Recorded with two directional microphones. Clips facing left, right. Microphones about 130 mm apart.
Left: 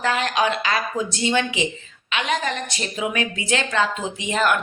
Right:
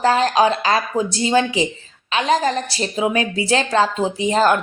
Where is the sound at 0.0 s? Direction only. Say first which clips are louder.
Right 6 dB; 35° right (ahead or behind).